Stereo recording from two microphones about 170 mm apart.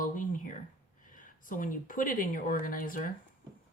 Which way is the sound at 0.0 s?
50° left (ahead or behind).